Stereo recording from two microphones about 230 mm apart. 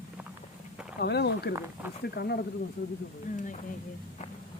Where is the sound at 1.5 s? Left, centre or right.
Centre.